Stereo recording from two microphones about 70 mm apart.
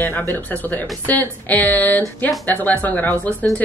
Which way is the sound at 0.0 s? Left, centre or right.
Left.